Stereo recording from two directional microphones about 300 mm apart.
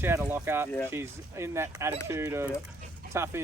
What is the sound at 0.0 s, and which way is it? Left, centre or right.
Speech, centre.